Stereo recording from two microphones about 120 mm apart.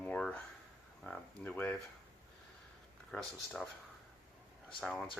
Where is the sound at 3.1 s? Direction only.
5° left (ahead or behind).